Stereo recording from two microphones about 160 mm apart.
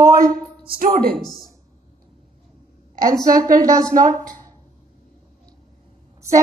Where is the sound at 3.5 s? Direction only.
25° right (ahead or behind).